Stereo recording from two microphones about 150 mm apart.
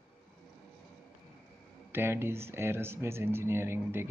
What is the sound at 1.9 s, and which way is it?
Speech, 15° right (ahead or behind).